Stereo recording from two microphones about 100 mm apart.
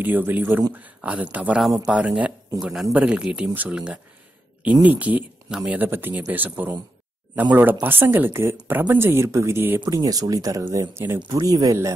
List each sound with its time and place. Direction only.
0.0 s speech: 20° right (ahead or behind)
7.8 s speech: 20° right (ahead or behind)
11.2 s speech: 45° right (ahead or behind)